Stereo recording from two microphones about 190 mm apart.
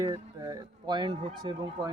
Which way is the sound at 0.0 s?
20° right (ahead or behind).